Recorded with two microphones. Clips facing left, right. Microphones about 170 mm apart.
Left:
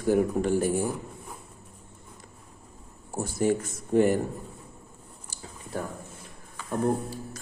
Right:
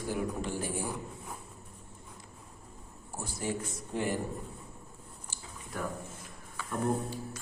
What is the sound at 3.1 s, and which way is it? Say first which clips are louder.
A man's voice: left 10 dB; 50° left (ahead or behind).